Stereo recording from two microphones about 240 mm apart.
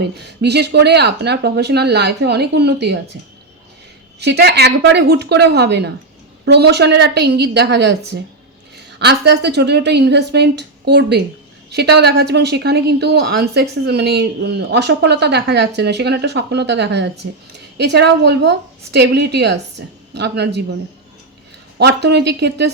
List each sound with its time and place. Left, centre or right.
0.0 s a woman's voice: right
4.2 s a woman's voice: right
21.8 s a woman's voice: right